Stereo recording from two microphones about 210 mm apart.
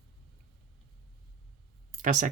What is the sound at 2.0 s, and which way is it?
Speech, 40° right (ahead or behind).